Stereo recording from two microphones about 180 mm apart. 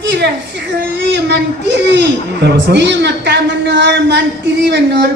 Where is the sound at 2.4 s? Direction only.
70° right (ahead or behind).